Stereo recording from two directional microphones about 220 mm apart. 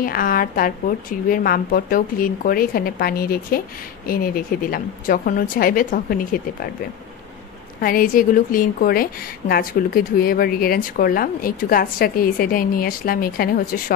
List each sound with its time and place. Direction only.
0.0 s a woman's voice: 40° left (ahead or behind)
7.8 s a woman's voice: 40° left (ahead or behind)